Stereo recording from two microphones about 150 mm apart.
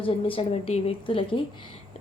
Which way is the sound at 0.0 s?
40° left (ahead or behind).